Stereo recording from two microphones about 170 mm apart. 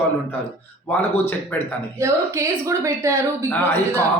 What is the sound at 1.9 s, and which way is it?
A woman's voice, 15° right (ahead or behind).